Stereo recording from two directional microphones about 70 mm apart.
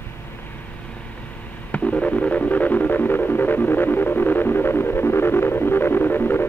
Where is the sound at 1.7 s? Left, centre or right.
Centre.